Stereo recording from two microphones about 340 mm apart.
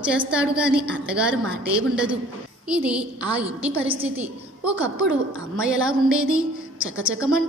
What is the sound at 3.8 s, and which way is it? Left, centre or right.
Speech, centre.